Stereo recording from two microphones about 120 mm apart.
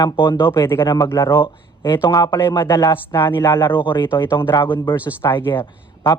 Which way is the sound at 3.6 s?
40° left (ahead or behind).